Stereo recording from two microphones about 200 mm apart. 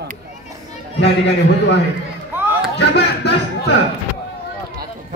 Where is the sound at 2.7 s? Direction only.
55° left (ahead or behind).